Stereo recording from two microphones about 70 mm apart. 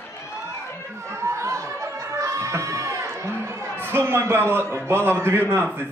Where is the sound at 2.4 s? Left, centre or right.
Right.